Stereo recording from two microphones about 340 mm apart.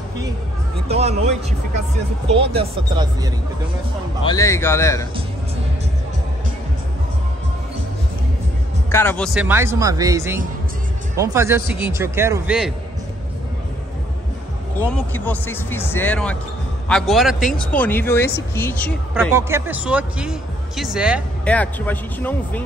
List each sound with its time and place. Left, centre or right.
0.8 s speech: centre
2.5 s speech: centre
4.2 s a man's voice: centre
8.9 s speech: centre
14.8 s a man's voice: centre
19.3 s speech: centre